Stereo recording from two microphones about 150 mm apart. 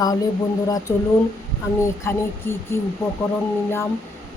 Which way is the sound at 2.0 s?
15° left (ahead or behind).